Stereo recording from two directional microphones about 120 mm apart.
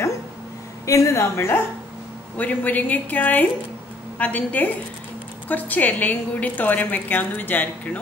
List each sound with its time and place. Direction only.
0.8 s a woman's voice: 25° left (ahead or behind)